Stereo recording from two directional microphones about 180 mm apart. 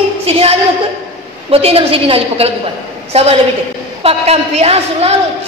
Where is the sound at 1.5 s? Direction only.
35° right (ahead or behind).